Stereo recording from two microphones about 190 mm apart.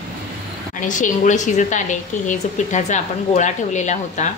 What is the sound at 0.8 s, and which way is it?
A woman's voice, 40° left (ahead or behind).